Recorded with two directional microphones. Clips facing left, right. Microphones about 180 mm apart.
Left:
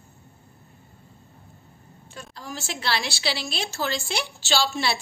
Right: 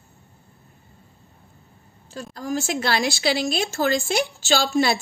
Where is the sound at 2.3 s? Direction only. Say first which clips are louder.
Right 10 dB; 45° right (ahead or behind).